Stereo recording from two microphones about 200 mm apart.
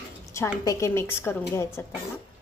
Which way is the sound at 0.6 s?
15° left (ahead or behind).